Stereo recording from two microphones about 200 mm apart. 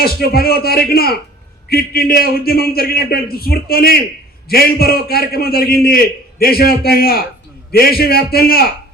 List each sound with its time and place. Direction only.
0.0 s a man's voice: 50° left (ahead or behind)